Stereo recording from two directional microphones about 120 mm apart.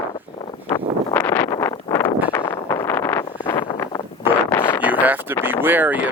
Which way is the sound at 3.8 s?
30° left (ahead or behind).